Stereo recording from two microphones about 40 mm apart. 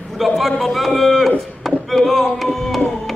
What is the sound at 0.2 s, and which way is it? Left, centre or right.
A man's voice, centre.